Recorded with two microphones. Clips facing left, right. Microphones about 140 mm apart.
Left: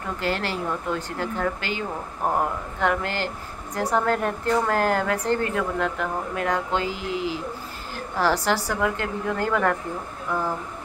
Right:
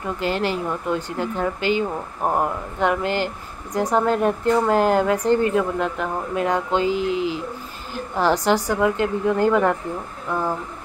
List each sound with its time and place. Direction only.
0.2 s speech: 15° right (ahead or behind)